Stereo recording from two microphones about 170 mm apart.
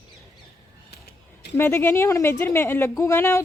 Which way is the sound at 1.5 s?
15° left (ahead or behind).